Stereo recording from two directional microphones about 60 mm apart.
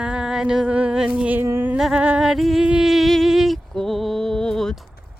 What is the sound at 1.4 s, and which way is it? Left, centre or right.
Speech, right.